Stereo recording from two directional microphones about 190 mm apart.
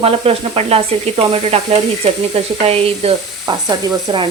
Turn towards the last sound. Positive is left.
turn(degrees=-20)  # may be behind; listen again after turning